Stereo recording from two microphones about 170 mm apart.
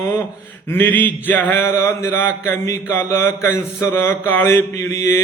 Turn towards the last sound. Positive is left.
turn(degrees=15)  # may be behind; listen again after turning